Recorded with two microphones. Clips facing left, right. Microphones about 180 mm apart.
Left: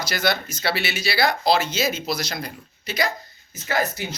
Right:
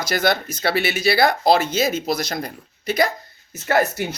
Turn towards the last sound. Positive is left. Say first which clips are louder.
# right 5 dB
turn(degrees=-65)  # may be behind; listen again after turning